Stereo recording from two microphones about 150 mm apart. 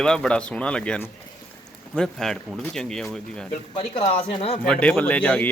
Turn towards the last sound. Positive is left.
turn(degrees=10)  # may be behind; listen again after turning